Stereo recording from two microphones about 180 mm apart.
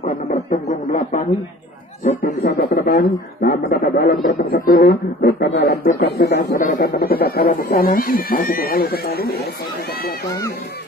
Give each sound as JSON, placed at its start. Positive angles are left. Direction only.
{"t": 0.0, "sound": "a sound", "side_deg": 45}
{"t": 2.0, "sound": "speech", "side_deg": 50}
{"t": 6.6, "sound": "speech", "side_deg": 50}